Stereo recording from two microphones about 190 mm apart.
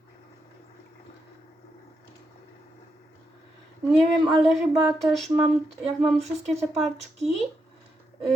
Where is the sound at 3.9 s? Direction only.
30° right (ahead or behind).